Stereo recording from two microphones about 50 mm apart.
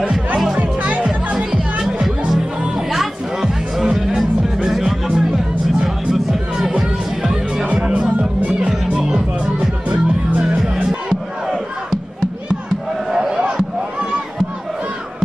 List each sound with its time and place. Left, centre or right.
0.6 s music: right
7.6 s music: right
9.8 s music: right
10.6 s music: centre
13.1 s a sound: centre